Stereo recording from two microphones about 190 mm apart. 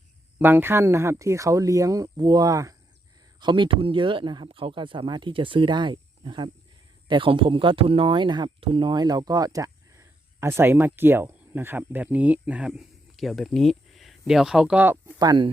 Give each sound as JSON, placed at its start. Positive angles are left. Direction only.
{"t": 0.3, "sound": "speech", "side_deg": -10}
{"t": 15.2, "sound": "speech", "side_deg": -20}